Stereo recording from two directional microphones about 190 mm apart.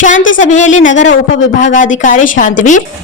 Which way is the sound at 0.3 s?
40° left (ahead or behind).